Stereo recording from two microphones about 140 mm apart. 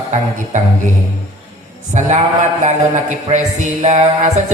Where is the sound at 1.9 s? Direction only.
60° right (ahead or behind).